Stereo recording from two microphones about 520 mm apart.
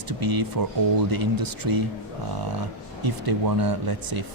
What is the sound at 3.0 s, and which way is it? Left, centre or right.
Speech, right.